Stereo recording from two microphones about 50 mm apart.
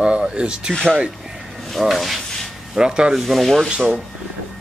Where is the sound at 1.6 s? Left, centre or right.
Centre.